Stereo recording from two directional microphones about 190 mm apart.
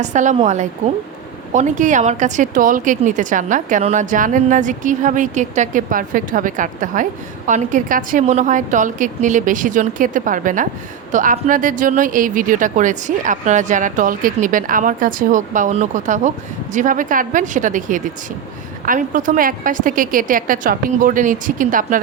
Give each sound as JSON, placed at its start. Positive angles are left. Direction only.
{"t": 0.0, "sound": "a woman's voice", "side_deg": -40}